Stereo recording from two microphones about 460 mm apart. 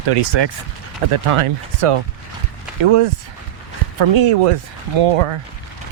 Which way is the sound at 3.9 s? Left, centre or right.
Right.